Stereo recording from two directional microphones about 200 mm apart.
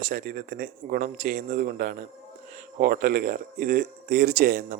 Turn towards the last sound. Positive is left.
turn(degrees=-45)  # may be behind; listen again after turning